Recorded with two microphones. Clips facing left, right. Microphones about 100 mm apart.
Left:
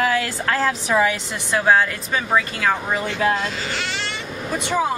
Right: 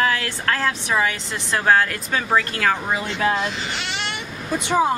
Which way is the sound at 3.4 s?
20° right (ahead or behind).